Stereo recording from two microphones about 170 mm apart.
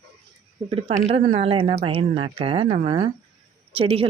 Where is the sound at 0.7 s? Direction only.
35° right (ahead or behind).